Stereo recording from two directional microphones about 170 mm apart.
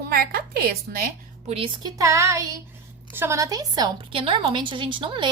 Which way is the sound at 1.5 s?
30° right (ahead or behind).